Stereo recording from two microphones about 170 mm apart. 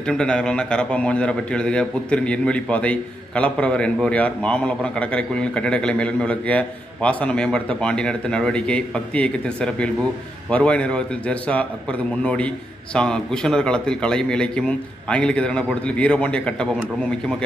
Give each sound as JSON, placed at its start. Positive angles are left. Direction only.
{"t": 0.0, "sound": "a man's voice", "side_deg": 5}